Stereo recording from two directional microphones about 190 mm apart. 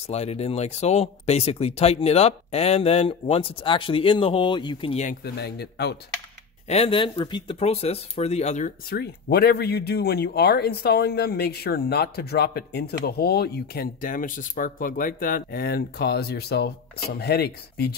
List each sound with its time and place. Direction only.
0.0 s speech: 35° left (ahead or behind)
5.2 s speech: 60° left (ahead or behind)
6.7 s speech: 30° left (ahead or behind); by 17.9 s 60° left (ahead or behind)